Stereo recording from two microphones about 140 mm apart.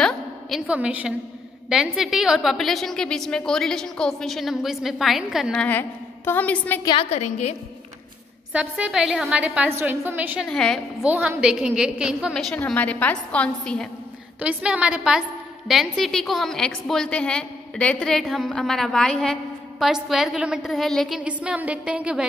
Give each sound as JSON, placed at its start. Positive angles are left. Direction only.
{"t": 0.0, "sound": "a sound", "side_deg": 0}
{"t": 1.7, "sound": "a woman's voice", "side_deg": -5}
{"t": 5.5, "sound": "a woman's voice", "side_deg": 10}
{"t": 7.0, "sound": "a woman's voice", "side_deg": 50}
{"t": 8.5, "sound": "a woman's voice", "side_deg": -10}
{"t": 10.5, "sound": "a woman's voice", "side_deg": 5}
{"t": 11.1, "sound": "a woman's voice", "side_deg": -10}
{"t": 12.5, "sound": "a woman's voice", "side_deg": 10}
{"t": 14.4, "sound": "a woman's voice", "side_deg": -5}
{"t": 21.2, "sound": "a woman's voice", "side_deg": -10}